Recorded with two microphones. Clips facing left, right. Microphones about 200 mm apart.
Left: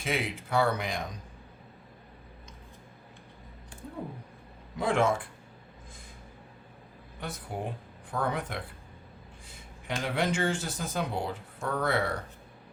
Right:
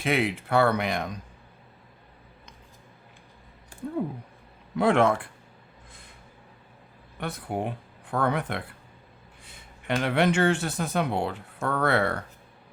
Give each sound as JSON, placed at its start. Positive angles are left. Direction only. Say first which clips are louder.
{"t": 0.0, "sound": "speech", "louder": "right 6 dB", "side_deg": -65}
{"t": 4.8, "sound": "speech", "louder": "right 5 dB", "side_deg": -65}
{"t": 7.2, "sound": "speech", "louder": "right 6 dB", "side_deg": -65}